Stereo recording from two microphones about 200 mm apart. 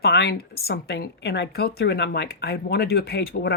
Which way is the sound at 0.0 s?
55° left (ahead or behind).